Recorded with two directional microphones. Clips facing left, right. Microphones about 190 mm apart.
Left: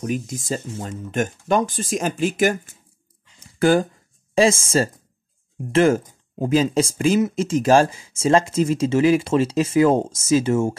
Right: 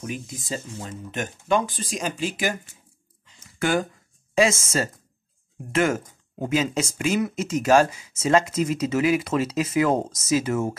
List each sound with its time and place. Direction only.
0.0 s speech: 45° left (ahead or behind)
3.3 s a sound: 35° left (ahead or behind)
4.4 s a woman's voice: 30° left (ahead or behind)